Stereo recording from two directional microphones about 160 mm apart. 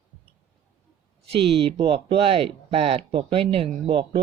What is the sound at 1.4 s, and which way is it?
Speech, 35° right (ahead or behind).